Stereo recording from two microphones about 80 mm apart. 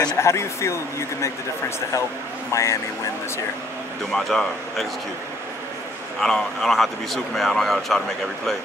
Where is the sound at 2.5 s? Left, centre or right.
Left.